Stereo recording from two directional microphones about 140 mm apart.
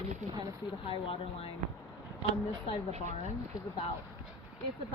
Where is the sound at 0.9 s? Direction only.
40° left (ahead or behind).